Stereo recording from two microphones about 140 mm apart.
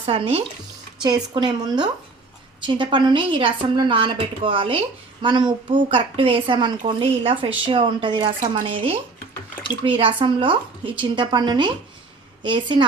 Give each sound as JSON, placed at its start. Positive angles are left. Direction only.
{"t": 0.0, "sound": "a woman's voice", "side_deg": -40}
{"t": 1.0, "sound": "a woman's voice", "side_deg": -30}
{"t": 10.0, "sound": "a woman's voice", "side_deg": -40}